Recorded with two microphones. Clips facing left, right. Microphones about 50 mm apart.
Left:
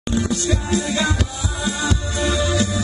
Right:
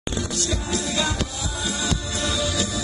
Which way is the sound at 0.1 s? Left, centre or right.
Left.